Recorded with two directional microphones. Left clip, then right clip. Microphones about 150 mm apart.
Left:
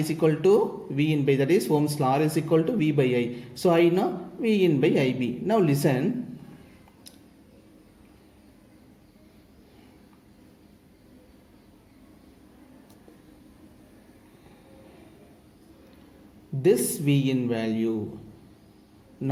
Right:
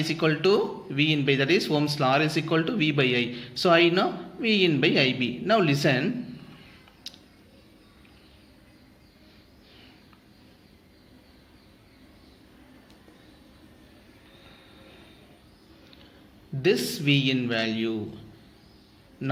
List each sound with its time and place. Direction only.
0.0 s speech: 15° left (ahead or behind)
16.6 s speech: 20° left (ahead or behind)